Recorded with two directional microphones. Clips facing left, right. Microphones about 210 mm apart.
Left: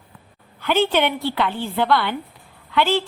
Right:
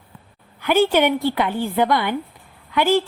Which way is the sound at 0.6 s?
10° right (ahead or behind).